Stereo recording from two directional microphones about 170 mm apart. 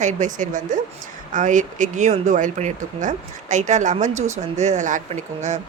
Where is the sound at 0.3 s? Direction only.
50° right (ahead or behind).